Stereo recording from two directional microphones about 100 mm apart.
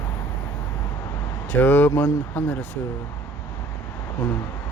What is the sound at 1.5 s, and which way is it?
Speech, 20° left (ahead or behind).